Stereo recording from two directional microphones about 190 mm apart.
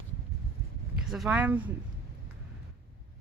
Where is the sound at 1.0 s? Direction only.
5° right (ahead or behind).